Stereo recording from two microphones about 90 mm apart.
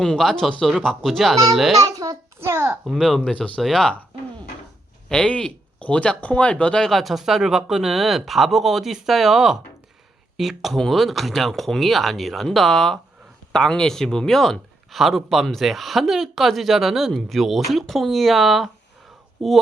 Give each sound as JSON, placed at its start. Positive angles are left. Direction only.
{"t": 0.0, "sound": "speech", "side_deg": 5}
{"t": 1.8, "sound": "babbling", "side_deg": -40}
{"t": 2.4, "sound": "a child's voice", "side_deg": -25}
{"t": 2.8, "sound": "speech", "side_deg": 0}
{"t": 5.0, "sound": "speech", "side_deg": 10}